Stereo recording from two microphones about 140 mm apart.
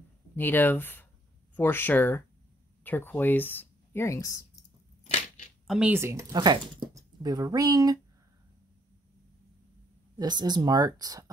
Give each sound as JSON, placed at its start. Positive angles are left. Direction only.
{"t": 0.4, "sound": "speech", "side_deg": 15}
{"t": 5.7, "sound": "speech", "side_deg": -10}
{"t": 6.3, "sound": "speech", "side_deg": -30}
{"t": 10.1, "sound": "speech", "side_deg": -30}